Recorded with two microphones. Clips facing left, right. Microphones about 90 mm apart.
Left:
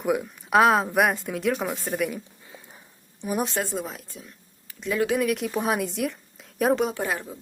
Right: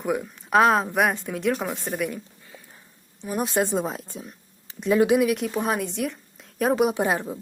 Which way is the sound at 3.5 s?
20° right (ahead or behind).